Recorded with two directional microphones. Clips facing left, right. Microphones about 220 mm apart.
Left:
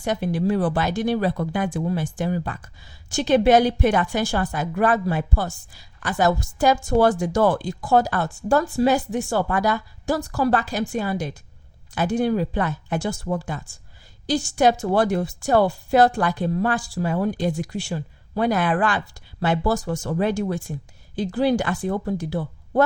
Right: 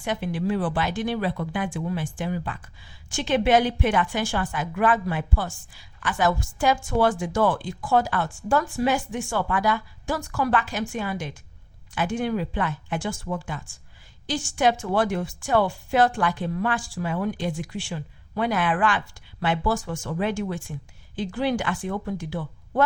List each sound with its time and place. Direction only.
0.0 s speech: 40° left (ahead or behind)